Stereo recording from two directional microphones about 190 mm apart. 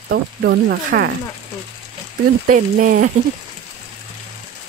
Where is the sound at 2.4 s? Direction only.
45° right (ahead or behind).